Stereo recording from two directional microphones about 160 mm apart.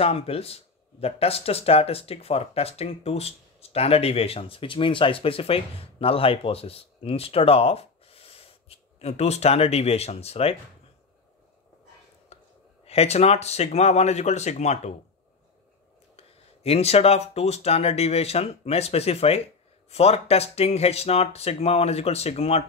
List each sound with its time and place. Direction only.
0.0 s speech: 40° left (ahead or behind)
12.3 s a sound: 40° left (ahead or behind)
12.8 s speech: 40° left (ahead or behind)
16.2 s speech: 40° left (ahead or behind)